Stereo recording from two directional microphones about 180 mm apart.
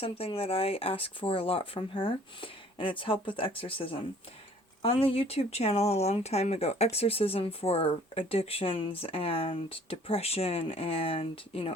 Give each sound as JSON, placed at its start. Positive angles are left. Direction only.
{"t": 0.0, "sound": "speech", "side_deg": 30}